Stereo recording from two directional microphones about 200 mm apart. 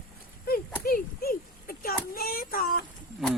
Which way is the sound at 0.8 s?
50° left (ahead or behind).